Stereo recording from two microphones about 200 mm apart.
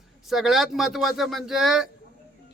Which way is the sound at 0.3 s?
Centre (ahead or behind).